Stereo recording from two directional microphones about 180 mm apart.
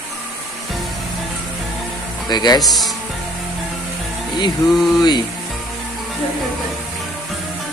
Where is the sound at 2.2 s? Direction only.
25° left (ahead or behind).